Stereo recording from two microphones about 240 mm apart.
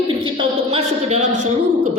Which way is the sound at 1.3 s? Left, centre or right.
Right.